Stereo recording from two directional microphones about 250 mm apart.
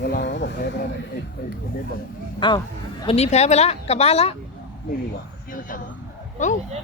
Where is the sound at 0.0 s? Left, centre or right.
Left.